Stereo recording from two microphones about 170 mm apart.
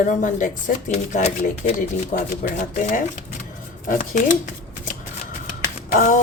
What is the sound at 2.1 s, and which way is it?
Speech, 55° left (ahead or behind).